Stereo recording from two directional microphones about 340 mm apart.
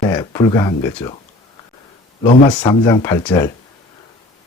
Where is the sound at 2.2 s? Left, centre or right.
Centre.